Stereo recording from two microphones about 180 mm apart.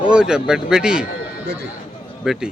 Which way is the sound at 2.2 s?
Centre (ahead or behind).